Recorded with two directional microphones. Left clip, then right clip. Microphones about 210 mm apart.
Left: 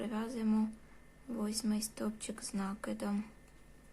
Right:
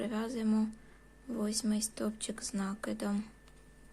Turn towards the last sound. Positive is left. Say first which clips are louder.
# right 2 dB
turn(degrees=-10)  # may be behind; listen again after turning